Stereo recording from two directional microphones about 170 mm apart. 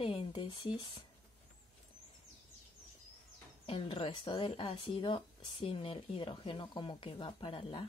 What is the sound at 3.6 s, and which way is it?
Speech, 30° left (ahead or behind).